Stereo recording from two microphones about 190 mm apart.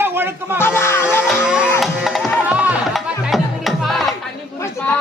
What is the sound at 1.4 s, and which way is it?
Speech, 5° right (ahead or behind).